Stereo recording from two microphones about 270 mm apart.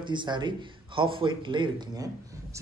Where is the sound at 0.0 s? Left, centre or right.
Centre.